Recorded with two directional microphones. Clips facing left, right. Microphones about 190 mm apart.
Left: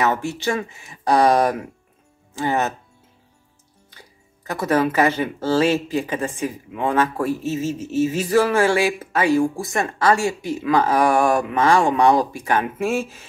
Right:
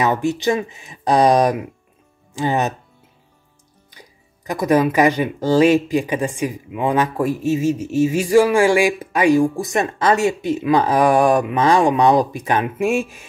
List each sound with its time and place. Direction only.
0.0 s speech: 15° right (ahead or behind)
3.9 s speech: 15° right (ahead or behind)